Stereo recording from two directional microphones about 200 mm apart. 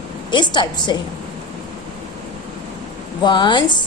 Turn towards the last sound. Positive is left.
turn(degrees=20)  # may be behind; listen again after turning